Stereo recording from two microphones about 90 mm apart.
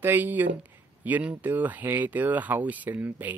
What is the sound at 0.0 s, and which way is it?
Speech, 20° right (ahead or behind).